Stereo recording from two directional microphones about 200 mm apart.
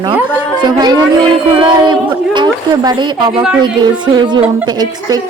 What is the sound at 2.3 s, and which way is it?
A woman's voice, 20° right (ahead or behind).